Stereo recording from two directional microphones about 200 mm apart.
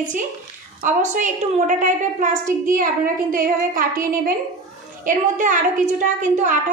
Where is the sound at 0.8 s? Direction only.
40° right (ahead or behind).